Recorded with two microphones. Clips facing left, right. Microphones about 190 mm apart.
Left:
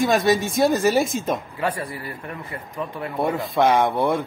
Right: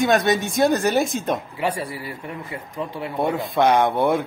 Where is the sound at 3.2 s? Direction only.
Centre (ahead or behind).